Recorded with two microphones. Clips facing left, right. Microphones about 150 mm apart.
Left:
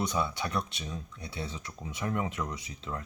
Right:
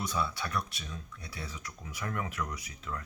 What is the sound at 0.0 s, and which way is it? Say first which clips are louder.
Speech: left 3 dB; 20° left (ahead or behind).